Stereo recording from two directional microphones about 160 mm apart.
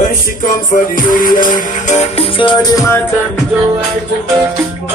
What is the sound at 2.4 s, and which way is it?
Music, 30° left (ahead or behind).